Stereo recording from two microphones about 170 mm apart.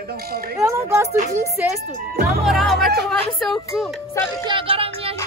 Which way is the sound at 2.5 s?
Centre (ahead or behind).